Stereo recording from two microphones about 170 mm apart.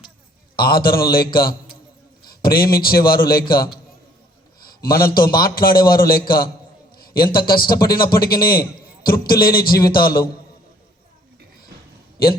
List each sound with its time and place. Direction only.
0.7 s a man's voice: 60° left (ahead or behind)
4.6 s a man's voice: 60° left (ahead or behind)